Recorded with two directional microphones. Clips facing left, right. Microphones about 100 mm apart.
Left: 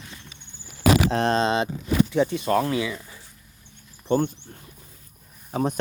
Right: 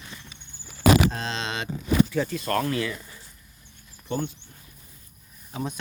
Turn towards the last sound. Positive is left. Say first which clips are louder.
# left 7 dB
turn(degrees=50)  # may be behind; listen again after turning